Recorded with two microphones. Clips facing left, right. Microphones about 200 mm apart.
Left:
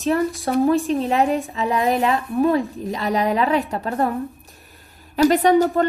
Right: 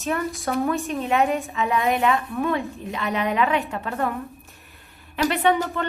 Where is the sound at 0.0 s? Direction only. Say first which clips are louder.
Left 6 dB; 30° left (ahead or behind).